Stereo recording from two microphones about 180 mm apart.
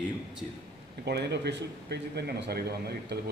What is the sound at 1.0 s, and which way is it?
Speech, 65° right (ahead or behind).